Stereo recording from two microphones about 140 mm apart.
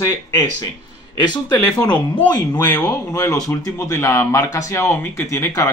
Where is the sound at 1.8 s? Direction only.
30° left (ahead or behind).